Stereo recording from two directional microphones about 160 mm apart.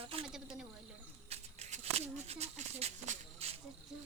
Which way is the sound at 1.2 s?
40° right (ahead or behind).